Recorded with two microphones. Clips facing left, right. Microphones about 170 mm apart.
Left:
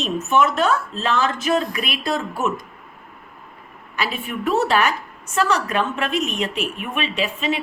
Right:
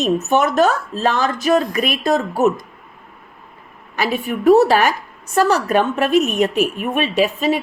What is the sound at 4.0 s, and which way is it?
A woman's voice, 40° right (ahead or behind).